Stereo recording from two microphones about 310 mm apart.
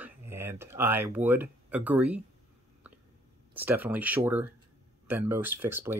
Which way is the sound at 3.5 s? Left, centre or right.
Centre.